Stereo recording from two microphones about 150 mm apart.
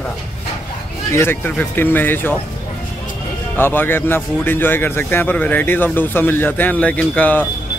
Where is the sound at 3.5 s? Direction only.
15° left (ahead or behind).